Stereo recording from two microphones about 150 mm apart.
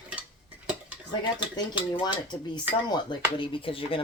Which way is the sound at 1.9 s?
30° left (ahead or behind).